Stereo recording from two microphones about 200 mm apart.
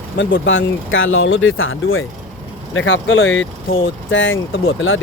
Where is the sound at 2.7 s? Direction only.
75° left (ahead or behind).